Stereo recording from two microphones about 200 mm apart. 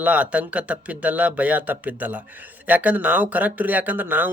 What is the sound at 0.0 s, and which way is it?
Speech, 5° right (ahead or behind).